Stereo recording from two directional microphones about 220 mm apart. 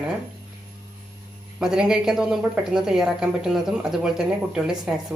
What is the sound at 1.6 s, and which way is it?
A woman's voice, centre (ahead or behind).